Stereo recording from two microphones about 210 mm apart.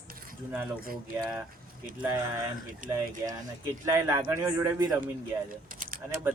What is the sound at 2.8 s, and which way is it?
Speech, 40° right (ahead or behind).